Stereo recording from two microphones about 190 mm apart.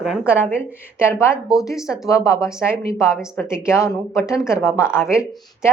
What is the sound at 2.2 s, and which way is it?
Speech, 15° left (ahead or behind).